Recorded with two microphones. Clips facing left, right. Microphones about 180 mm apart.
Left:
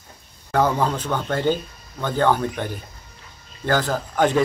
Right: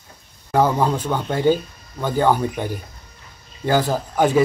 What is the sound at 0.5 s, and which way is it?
Speech, 10° right (ahead or behind).